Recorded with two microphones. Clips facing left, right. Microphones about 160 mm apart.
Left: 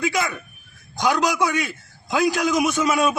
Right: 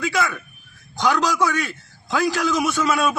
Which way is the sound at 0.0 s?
15° left (ahead or behind).